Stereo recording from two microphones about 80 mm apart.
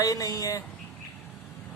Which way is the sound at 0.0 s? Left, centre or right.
Left.